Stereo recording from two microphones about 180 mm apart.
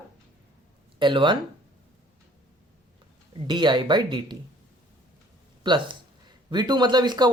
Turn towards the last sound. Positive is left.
turn(degrees=-25)  # may be behind; listen again after turning